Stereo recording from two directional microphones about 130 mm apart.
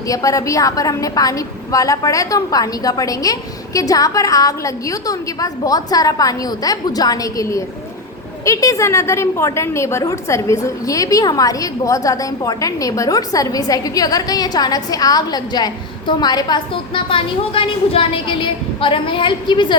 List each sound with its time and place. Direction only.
0.1 s a woman's voice: 25° left (ahead or behind)